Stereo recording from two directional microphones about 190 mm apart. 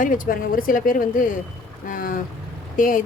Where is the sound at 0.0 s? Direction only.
45° left (ahead or behind).